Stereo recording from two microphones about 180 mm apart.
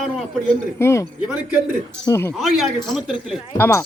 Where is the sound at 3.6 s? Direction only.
15° left (ahead or behind).